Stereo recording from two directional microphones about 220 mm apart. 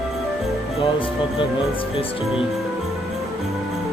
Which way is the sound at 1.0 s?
25° left (ahead or behind).